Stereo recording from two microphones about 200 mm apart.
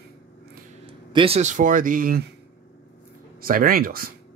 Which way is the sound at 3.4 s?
45° right (ahead or behind).